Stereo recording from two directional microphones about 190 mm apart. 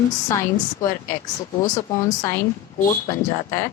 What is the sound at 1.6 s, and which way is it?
Speech, 15° left (ahead or behind).